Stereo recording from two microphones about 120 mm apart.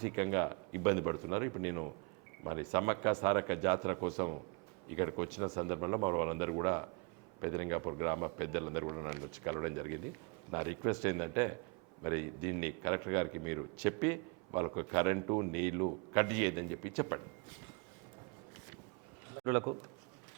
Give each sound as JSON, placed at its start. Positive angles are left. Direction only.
{"t": 0.0, "sound": "a man's voice", "side_deg": -20}
{"t": 19.5, "sound": "a man's voice", "side_deg": -25}